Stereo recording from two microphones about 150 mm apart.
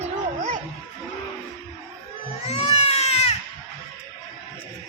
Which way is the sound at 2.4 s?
45° left (ahead or behind).